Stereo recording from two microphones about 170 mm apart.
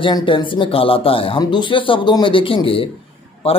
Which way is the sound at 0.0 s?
30° left (ahead or behind).